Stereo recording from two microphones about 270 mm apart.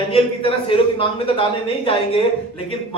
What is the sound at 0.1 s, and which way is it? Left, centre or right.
Speech, centre.